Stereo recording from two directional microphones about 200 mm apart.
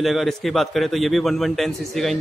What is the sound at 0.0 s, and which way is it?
A man's voice, centre (ahead or behind).